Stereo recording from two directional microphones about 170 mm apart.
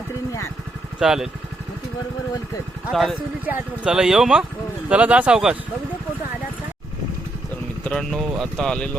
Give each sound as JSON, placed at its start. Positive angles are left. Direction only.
{"t": 0.9, "sound": "speech", "side_deg": -5}
{"t": 2.9, "sound": "speech", "side_deg": 0}
{"t": 7.9, "sound": "speech", "side_deg": 5}